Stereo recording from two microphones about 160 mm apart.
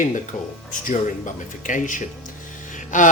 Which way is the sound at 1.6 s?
55° left (ahead or behind).